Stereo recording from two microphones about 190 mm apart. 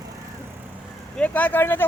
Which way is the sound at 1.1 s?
10° left (ahead or behind).